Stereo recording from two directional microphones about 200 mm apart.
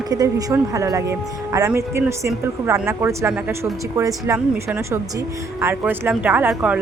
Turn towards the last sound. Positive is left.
turn(degrees=-5)  # may be behind; listen again after turning